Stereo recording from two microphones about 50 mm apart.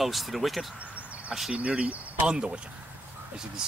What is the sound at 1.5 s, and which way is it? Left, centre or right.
Speech, right.